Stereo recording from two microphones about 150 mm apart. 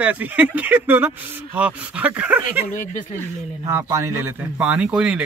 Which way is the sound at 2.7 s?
60° left (ahead or behind).